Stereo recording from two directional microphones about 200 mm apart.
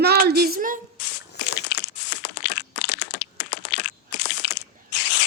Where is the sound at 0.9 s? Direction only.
55° left (ahead or behind).